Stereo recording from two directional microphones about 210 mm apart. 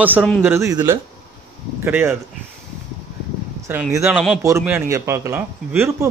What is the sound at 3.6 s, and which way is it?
Speech, 10° right (ahead or behind).